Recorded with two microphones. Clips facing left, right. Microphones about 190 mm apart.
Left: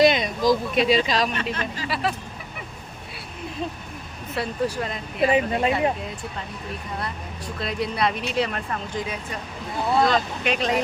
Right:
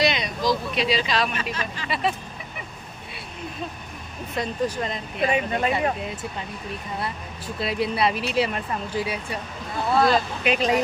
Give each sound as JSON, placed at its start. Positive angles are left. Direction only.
{"t": 0.0, "sound": "speech", "side_deg": 50}
{"t": 1.9, "sound": "speech", "side_deg": 0}
{"t": 4.4, "sound": "speech", "side_deg": 10}
{"t": 5.3, "sound": "speech", "side_deg": 30}
{"t": 7.0, "sound": "speech", "side_deg": -5}